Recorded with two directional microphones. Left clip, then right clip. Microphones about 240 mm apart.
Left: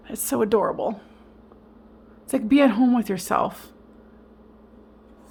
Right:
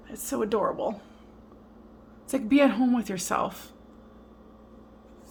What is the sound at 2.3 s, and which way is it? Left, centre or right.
A woman's voice, left.